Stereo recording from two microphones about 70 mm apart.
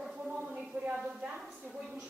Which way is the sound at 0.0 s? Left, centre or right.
Centre.